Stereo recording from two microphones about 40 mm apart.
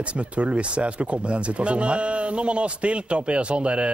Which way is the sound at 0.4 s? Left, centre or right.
Right.